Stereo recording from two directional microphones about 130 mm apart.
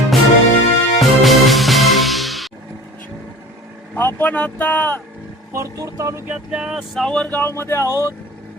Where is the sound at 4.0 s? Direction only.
15° left (ahead or behind).